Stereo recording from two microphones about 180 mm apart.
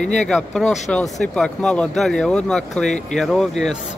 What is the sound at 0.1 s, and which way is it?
Speech, centre (ahead or behind).